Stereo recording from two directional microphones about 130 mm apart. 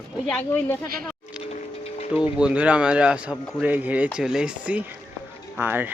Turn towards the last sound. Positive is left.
turn(degrees=-15)  # may be behind; listen again after turning